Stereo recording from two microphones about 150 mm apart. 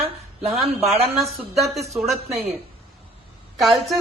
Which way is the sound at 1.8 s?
Centre (ahead or behind).